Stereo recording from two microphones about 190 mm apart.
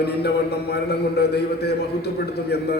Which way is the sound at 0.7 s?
55° left (ahead or behind).